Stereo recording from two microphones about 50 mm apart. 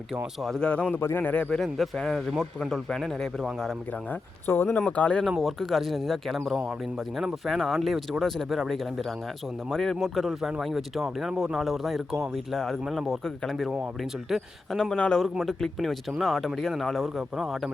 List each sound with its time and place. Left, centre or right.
0.6 s a man's voice: left
1.5 s speech: centre
4.1 s speech: left
4.9 s speech: left
5.4 s speech: centre
11.3 s speech: centre
11.5 s speech: centre
12.5 s speech: centre
13.7 s speech: centre
14.9 s speech: left
15.2 s speech: centre